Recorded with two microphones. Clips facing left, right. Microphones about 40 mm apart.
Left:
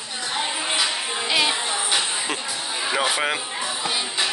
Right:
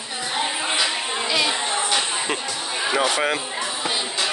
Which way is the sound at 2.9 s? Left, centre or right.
Centre.